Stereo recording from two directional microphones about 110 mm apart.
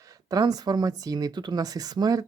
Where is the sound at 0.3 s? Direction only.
35° right (ahead or behind).